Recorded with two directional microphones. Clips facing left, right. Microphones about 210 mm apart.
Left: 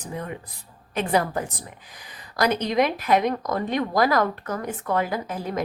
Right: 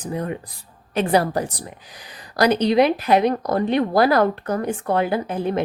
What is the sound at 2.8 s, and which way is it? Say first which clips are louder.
A woman's voice: right 2 dB; 35° right (ahead or behind).